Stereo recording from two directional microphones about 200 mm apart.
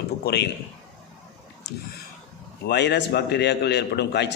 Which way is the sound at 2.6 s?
55° left (ahead or behind).